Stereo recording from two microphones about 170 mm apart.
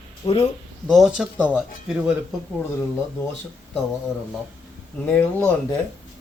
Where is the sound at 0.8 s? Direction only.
Centre (ahead or behind).